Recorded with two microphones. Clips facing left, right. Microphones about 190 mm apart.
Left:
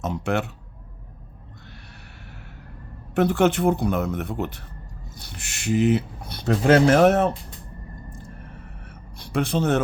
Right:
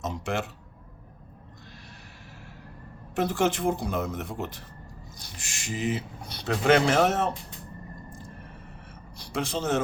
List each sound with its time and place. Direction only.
0.0 s speech: 60° left (ahead or behind)
3.2 s speech: 60° left (ahead or behind)
5.1 s a sound: 60° left (ahead or behind)
6.7 s speech: 45° left (ahead or behind); by 7.3 s 60° left (ahead or behind)
9.1 s speech: 60° left (ahead or behind)